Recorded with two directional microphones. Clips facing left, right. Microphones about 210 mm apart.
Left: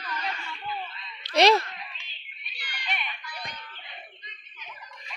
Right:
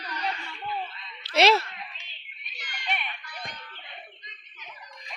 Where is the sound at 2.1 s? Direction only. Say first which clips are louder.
Even; 45° right (ahead or behind).